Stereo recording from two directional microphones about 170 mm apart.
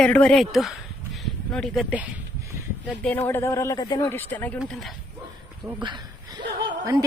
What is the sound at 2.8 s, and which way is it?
Speech, 10° left (ahead or behind).